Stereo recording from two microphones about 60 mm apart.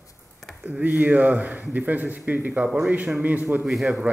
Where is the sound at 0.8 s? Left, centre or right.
Right.